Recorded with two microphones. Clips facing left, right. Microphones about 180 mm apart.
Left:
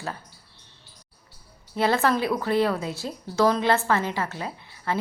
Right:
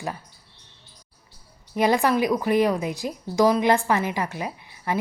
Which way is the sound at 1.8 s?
15° right (ahead or behind).